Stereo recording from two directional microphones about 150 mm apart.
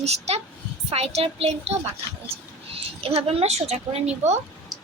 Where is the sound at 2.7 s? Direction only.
40° right (ahead or behind).